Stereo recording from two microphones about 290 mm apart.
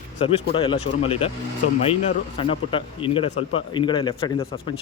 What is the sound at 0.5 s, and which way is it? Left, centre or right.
Speech, centre.